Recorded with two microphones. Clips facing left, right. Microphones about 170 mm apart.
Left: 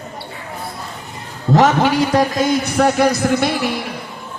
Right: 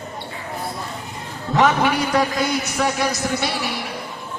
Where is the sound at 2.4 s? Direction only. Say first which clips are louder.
Left 6 dB; 55° left (ahead or behind).